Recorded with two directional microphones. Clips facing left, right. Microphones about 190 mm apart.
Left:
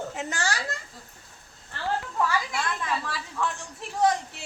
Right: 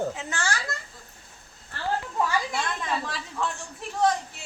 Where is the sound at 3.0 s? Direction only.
15° right (ahead or behind).